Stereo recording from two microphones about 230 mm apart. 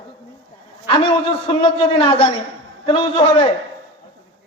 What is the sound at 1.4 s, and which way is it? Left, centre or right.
A man's voice, left.